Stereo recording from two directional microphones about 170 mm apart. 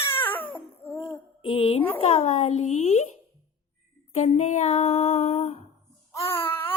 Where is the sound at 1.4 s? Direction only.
35° left (ahead or behind).